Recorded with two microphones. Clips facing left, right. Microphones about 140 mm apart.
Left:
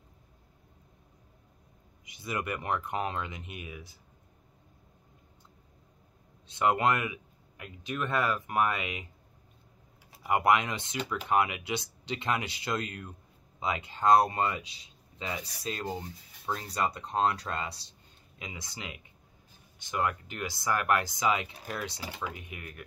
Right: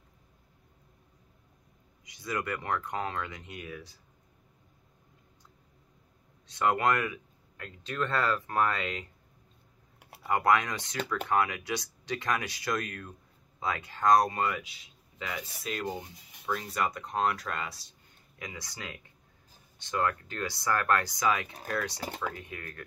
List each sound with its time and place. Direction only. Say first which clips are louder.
2.2 s speech: even; 20° left (ahead or behind)
6.5 s speech: even; 20° left (ahead or behind)
10.2 s speech: even; 20° left (ahead or behind)